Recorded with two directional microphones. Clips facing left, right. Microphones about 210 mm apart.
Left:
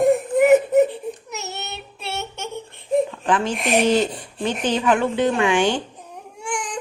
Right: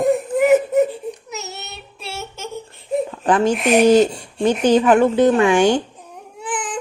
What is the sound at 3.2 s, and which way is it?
Speech, 40° right (ahead or behind).